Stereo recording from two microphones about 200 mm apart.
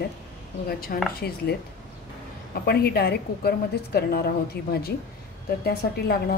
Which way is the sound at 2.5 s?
50° left (ahead or behind).